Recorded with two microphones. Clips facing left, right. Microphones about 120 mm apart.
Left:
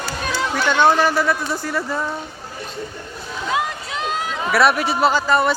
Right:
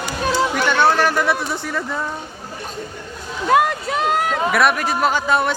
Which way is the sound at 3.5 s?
55° right (ahead or behind).